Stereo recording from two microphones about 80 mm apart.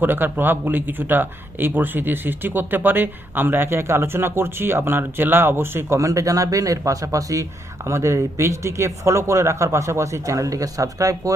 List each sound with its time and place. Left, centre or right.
0.0 s speech: right